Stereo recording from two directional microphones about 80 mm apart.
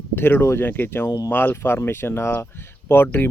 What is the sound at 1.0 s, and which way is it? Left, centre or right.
Speech, left.